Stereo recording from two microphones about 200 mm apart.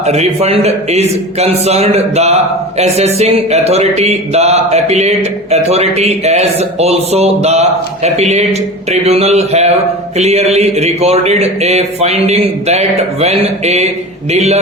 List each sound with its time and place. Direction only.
0.0 s a man's voice: 30° right (ahead or behind)